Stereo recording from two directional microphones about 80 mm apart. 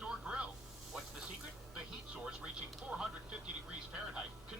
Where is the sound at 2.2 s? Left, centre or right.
Centre.